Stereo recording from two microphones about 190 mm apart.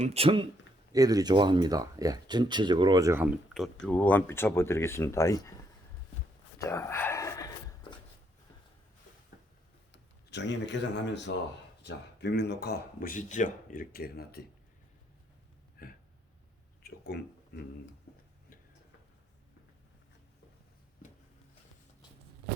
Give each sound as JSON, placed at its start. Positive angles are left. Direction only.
{"t": 0.0, "sound": "speech", "side_deg": -30}
{"t": 0.9, "sound": "speech", "side_deg": -20}
{"t": 3.8, "sound": "speech", "side_deg": 10}
{"t": 6.6, "sound": "a sound", "side_deg": 15}
{"t": 9.9, "sound": "speech", "side_deg": 65}
{"t": 15.8, "sound": "a sound", "side_deg": 50}
{"t": 16.8, "sound": "speech", "side_deg": 60}